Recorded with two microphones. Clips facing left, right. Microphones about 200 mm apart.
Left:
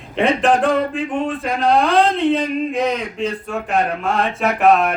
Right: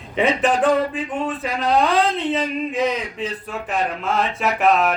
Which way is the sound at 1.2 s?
55° left (ahead or behind).